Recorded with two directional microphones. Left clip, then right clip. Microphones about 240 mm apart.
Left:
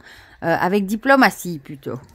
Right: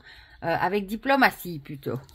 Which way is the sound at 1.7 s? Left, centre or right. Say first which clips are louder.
Even; left.